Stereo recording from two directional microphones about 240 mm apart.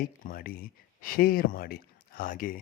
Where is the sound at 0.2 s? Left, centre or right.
Left.